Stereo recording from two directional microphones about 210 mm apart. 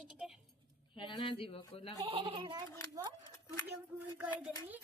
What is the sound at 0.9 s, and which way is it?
Speech, 25° left (ahead or behind).